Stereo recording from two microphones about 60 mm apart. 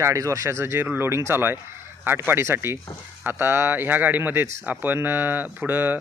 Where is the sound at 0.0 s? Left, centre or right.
Right.